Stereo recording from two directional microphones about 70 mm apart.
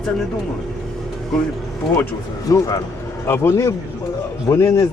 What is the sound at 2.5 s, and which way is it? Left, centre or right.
Speech, left.